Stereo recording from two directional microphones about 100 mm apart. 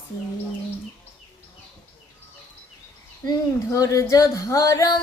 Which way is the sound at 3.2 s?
35° left (ahead or behind).